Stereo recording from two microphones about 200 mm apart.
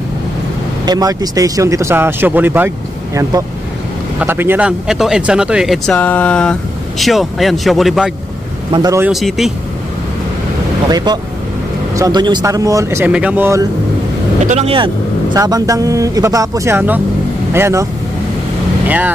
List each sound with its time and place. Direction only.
0.8 s speech: 20° right (ahead or behind)
4.2 s speech: 10° right (ahead or behind)
8.7 s speech: 15° right (ahead or behind)
9.1 s speech: centre (ahead or behind)
10.9 s speech: 20° right (ahead or behind)
14.4 s speech: 35° right (ahead or behind)
15.3 s speech: 20° right (ahead or behind)
18.9 s speech: 10° right (ahead or behind)